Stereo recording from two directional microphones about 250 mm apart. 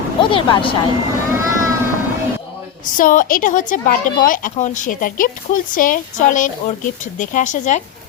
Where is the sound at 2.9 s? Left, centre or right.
Left.